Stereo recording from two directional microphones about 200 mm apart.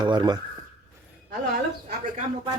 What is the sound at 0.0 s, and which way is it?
Speech, 20° right (ahead or behind).